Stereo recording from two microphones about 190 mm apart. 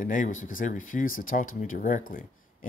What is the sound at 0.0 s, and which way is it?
Speech, 45° left (ahead or behind).